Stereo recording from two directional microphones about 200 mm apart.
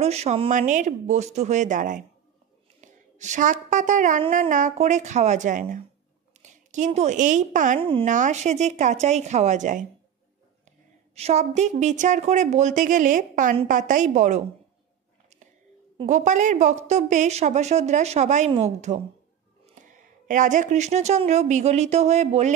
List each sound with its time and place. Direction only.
0.0 s a woman's voice: 30° right (ahead or behind)
11.1 s a woman's voice: 35° right (ahead or behind)
16.1 s a woman's voice: 40° right (ahead or behind)